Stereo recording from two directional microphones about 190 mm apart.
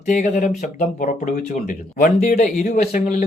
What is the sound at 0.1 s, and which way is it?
A man's voice, 40° left (ahead or behind).